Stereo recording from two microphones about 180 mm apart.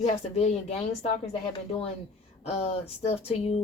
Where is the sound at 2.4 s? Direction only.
35° left (ahead or behind).